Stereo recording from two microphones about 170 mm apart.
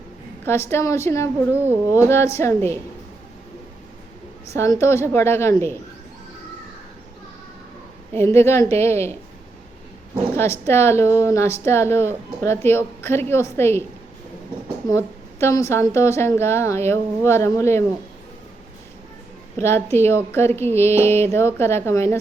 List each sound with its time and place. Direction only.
0.4 s a woman's voice: 15° left (ahead or behind)
1.6 s speech: 10° right (ahead or behind)
2.0 s a woman's voice: 15° left (ahead or behind)
4.5 s a woman's voice: 15° left (ahead or behind)
8.1 s a woman's voice: 15° left (ahead or behind)
10.3 s a woman's voice: 15° left (ahead or behind)
14.8 s a woman's voice: 15° left (ahead or behind)
19.5 s a woman's voice: 15° left (ahead or behind)